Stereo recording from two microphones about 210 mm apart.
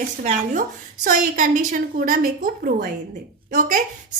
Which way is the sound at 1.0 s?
40° right (ahead or behind).